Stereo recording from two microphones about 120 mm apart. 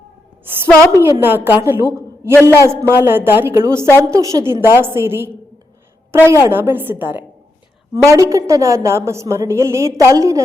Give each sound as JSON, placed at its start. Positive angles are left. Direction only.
{"t": 0.9, "sound": "a woman's voice", "side_deg": -20}